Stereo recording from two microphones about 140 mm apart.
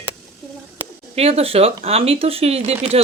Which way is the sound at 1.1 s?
45° right (ahead or behind).